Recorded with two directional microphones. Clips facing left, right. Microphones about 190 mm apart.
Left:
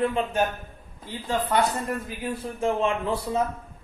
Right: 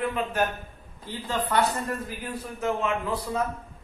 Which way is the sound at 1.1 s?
15° left (ahead or behind).